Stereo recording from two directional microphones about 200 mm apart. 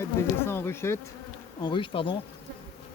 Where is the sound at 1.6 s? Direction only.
25° left (ahead or behind).